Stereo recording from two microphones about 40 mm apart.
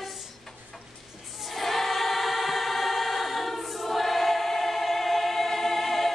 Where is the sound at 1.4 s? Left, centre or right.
Centre.